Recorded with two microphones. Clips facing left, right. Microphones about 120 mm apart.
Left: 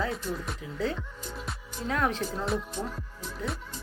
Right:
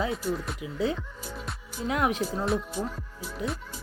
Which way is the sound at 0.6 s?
15° right (ahead or behind).